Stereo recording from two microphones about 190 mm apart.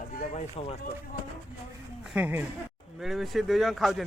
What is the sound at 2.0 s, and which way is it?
Speech, 5° right (ahead or behind).